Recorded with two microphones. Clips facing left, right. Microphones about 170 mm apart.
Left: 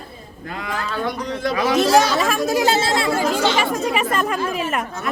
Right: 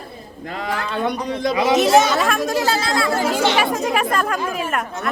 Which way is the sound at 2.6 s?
25° left (ahead or behind).